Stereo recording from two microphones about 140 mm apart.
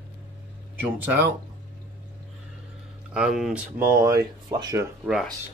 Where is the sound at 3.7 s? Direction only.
15° right (ahead or behind).